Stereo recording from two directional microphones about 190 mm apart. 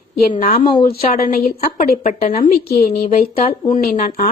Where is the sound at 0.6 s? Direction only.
25° left (ahead or behind).